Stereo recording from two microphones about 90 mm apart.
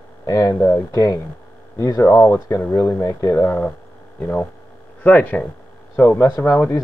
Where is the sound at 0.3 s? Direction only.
40° left (ahead or behind).